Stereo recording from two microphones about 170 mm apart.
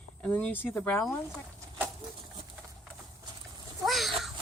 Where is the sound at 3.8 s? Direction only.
Centre (ahead or behind).